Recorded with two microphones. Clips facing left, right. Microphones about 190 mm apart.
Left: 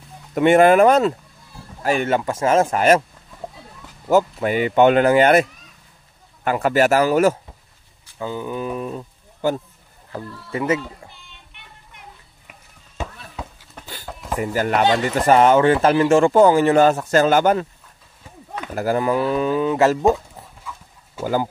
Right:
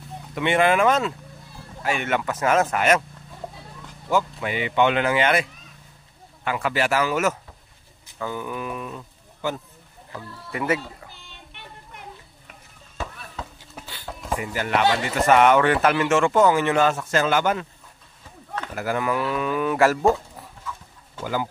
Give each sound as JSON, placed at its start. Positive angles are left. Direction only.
{"t": 0.3, "sound": "speech", "side_deg": 45}
{"t": 4.1, "sound": "speech", "side_deg": 40}
{"t": 8.2, "sound": "speech", "side_deg": 25}
{"t": 10.5, "sound": "speech", "side_deg": 25}
{"t": 12.9, "sound": "chop", "side_deg": 15}
{"t": 13.8, "sound": "a sound", "side_deg": -5}
{"t": 14.4, "sound": "speech", "side_deg": 40}
{"t": 18.8, "sound": "speech", "side_deg": 35}
{"t": 21.2, "sound": "speech", "side_deg": 40}